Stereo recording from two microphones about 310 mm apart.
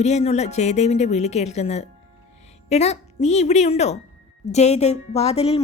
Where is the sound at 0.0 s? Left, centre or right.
Left.